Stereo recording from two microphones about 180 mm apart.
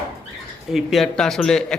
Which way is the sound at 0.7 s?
Centre (ahead or behind).